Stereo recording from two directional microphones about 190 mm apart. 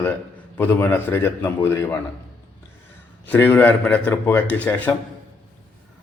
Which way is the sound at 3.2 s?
10° left (ahead or behind).